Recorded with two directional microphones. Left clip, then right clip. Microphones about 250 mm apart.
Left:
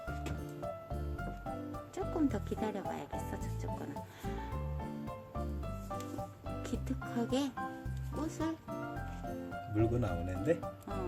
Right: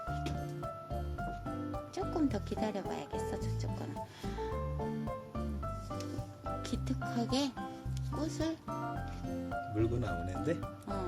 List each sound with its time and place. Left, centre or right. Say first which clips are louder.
2.0 s speech: even; centre
6.6 s speech: right 2 dB; centre
8.1 s music: right 1 dB; centre
9.7 s speech: left 3 dB; left